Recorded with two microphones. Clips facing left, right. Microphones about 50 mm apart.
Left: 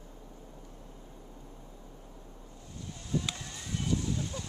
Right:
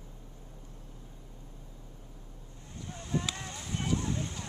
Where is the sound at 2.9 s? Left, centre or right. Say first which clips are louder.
Even; right.